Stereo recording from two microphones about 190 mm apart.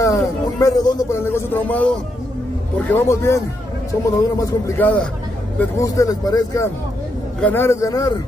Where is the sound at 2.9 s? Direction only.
15° left (ahead or behind).